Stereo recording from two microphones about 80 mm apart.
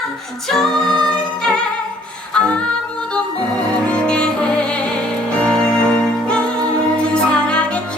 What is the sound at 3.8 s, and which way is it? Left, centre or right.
Music, centre.